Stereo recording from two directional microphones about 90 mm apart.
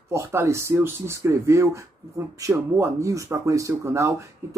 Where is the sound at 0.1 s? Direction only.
35° right (ahead or behind).